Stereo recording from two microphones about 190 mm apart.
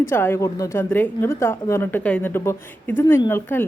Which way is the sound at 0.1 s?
10° left (ahead or behind).